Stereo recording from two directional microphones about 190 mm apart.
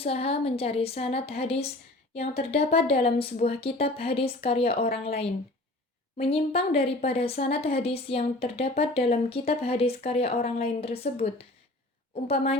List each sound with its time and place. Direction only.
0.0 s a woman's voice: 30° left (ahead or behind)